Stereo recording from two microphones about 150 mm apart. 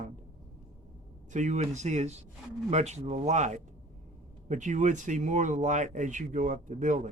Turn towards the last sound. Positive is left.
turn(degrees=-55)  # may be behind; listen again after turning